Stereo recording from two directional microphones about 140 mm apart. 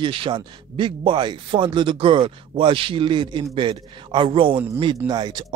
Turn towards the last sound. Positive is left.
turn(degrees=-30)  # may be behind; listen again after turning